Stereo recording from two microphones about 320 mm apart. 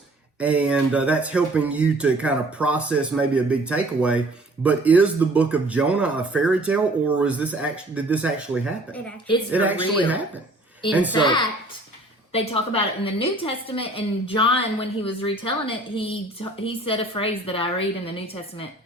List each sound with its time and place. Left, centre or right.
0.3 s speech: centre
11.1 s a woman's voice: centre